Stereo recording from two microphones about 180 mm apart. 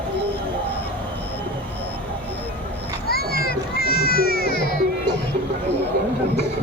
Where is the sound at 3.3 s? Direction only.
60° left (ahead or behind).